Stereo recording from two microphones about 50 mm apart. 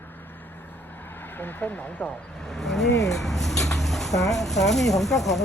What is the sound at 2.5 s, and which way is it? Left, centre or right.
Vehicle, centre.